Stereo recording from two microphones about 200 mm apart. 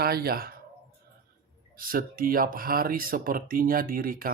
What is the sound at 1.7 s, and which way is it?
Speech, 45° right (ahead or behind).